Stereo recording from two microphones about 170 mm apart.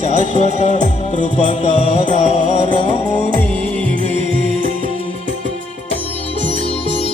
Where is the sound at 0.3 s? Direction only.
40° left (ahead or behind).